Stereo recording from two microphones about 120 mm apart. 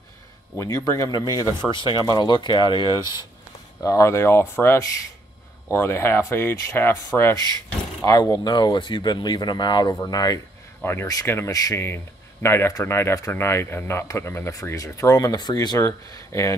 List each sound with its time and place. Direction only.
0.6 s speech: 25° left (ahead or behind)
3.8 s speech: 25° left (ahead or behind)
10.8 s speech: 20° left (ahead or behind)